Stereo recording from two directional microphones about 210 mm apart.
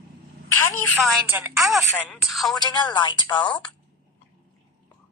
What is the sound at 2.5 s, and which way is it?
A woman's voice, 20° left (ahead or behind).